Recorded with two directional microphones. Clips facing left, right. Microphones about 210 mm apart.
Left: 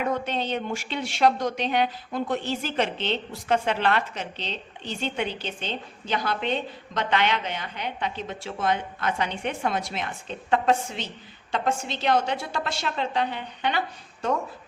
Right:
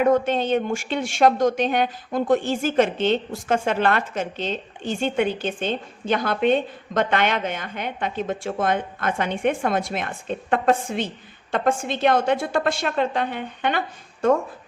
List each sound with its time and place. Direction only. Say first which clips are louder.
0.1 s a woman's voice: right 8 dB; 50° right (ahead or behind)